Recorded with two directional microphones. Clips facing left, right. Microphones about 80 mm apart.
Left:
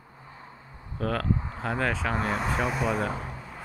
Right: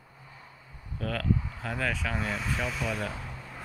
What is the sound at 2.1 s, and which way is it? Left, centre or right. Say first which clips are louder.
Speech: left 5 dB; left.